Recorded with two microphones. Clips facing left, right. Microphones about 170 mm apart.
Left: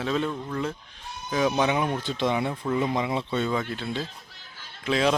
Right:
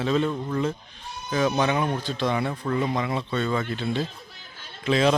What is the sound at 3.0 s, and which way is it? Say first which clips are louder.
Speech: even; 20° left (ahead or behind).